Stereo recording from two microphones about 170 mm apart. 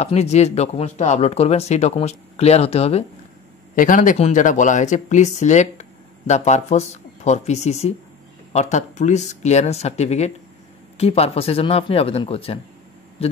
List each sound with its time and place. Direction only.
0.0 s speech: 40° left (ahead or behind)
3.7 s speech: 50° left (ahead or behind); by 13.4 s 35° left (ahead or behind)